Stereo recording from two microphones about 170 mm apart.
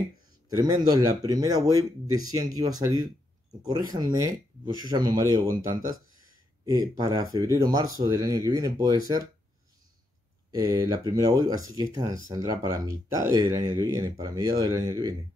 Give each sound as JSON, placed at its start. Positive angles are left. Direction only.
{"t": 0.6, "sound": "speech", "side_deg": -25}
{"t": 10.5, "sound": "speech", "side_deg": -20}